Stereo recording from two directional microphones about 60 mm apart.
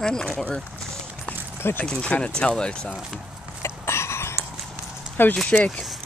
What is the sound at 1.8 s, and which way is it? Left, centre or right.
Speech, centre.